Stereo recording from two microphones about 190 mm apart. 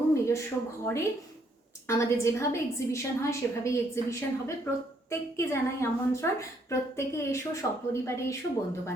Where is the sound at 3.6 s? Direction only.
15° left (ahead or behind).